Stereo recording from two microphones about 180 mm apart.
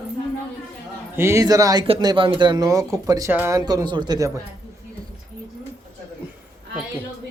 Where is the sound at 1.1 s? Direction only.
15° right (ahead or behind).